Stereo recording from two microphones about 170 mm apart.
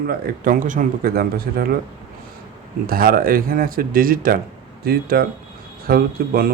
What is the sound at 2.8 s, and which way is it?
Speech, 60° right (ahead or behind).